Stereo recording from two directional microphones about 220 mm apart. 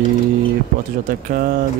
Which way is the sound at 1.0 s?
40° right (ahead or behind).